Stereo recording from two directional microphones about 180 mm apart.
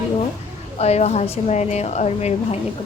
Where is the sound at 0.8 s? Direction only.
35° left (ahead or behind).